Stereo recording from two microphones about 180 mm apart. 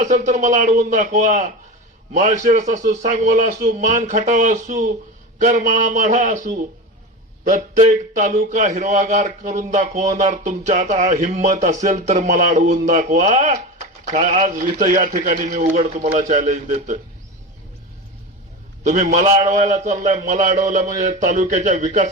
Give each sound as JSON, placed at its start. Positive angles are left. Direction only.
{"t": 0.0, "sound": "speech", "side_deg": -45}
{"t": 18.8, "sound": "a man's voice", "side_deg": -40}